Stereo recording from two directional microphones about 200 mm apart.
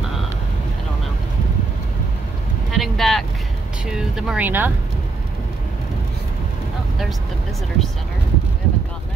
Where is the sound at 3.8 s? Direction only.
5° right (ahead or behind).